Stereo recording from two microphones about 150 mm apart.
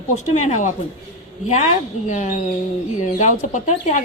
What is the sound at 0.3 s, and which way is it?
Speech, 50° left (ahead or behind).